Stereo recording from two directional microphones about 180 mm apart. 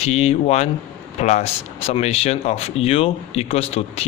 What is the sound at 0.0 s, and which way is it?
Speech, 35° left (ahead or behind).